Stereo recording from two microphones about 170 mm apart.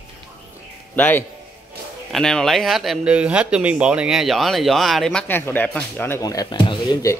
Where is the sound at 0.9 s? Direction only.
10° left (ahead or behind).